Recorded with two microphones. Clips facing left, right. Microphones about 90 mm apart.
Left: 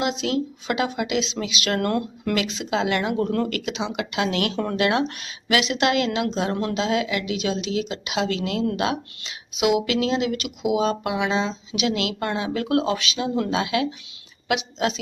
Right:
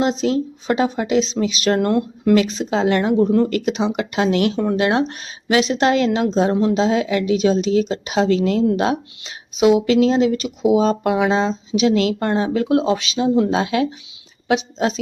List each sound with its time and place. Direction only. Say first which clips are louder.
0.0 s speech: right 5 dB; 35° right (ahead or behind)
2.3 s speech: right 8 dB; 40° right (ahead or behind)
3.2 s speech: right 8 dB; 20° right (ahead or behind)
3.5 s speech: right 7 dB; 40° right (ahead or behind)
4.5 s speech: right 6 dB; 15° right (ahead or behind)
4.8 s speech: even; 35° right (ahead or behind)
12.6 s speech: right 5 dB; 25° right (ahead or behind)